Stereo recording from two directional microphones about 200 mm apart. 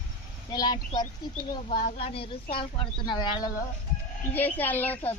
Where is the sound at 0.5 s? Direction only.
20° left (ahead or behind).